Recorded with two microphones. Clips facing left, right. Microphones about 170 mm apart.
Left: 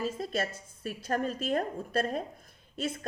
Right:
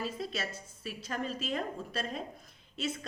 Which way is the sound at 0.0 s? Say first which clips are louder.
Left 5 dB; 50° left (ahead or behind).